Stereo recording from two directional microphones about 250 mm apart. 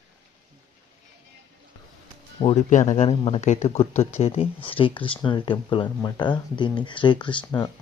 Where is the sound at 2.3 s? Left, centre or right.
Left.